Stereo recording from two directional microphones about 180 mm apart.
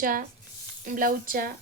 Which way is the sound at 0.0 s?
50° right (ahead or behind).